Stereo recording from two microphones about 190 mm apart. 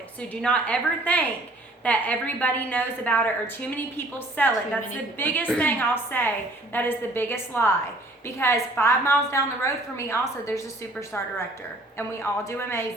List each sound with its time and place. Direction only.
0.2 s a woman's voice: 5° left (ahead or behind)
11.9 s a woman's voice: 10° left (ahead or behind)